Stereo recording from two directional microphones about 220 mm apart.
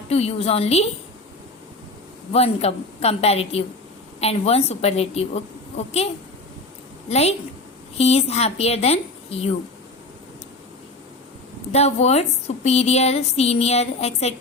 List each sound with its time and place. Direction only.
0.1 s a woman's voice: 30° left (ahead or behind)
2.3 s a woman's voice: 30° left (ahead or behind)
7.1 s a woman's voice: 30° left (ahead or behind)
11.7 s a woman's voice: 30° left (ahead or behind)